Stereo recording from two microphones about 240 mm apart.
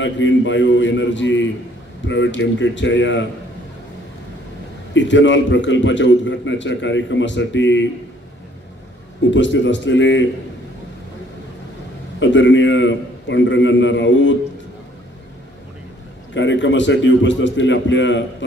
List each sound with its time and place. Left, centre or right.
0.0 s a man's voice: left
4.9 s a man's voice: left
9.3 s a man's voice: left
12.2 s a man's voice: left
16.3 s a man's voice: left